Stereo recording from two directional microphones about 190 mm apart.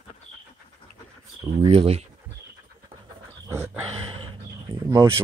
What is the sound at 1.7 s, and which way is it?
Speech, 30° right (ahead or behind).